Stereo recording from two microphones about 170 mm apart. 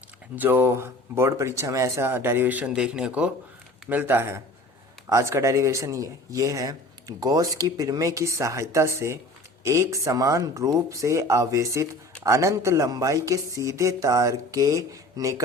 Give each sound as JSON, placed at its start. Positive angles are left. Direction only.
{"t": 0.3, "sound": "speech", "side_deg": -10}